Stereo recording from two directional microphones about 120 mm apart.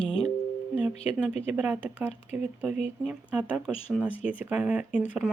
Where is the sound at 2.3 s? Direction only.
65° left (ahead or behind).